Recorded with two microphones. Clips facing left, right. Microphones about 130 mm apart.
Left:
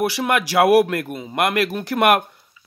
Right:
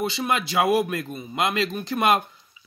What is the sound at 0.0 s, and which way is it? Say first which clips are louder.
A man's voice: left 5 dB; 80° left.